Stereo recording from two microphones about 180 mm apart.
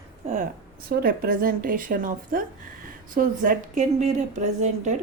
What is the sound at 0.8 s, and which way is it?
A woman's voice, 60° right (ahead or behind).